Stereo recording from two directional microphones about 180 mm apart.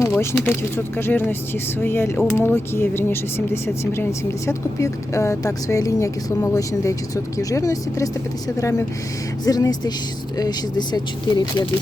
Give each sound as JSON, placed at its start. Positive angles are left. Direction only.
{"t": 0.0, "sound": "speech", "side_deg": 15}